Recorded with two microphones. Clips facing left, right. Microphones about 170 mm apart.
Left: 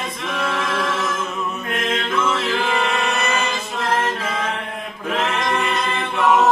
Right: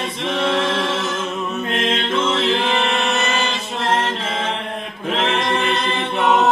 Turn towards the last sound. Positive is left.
turn(degrees=-25)  # may be behind; listen again after turning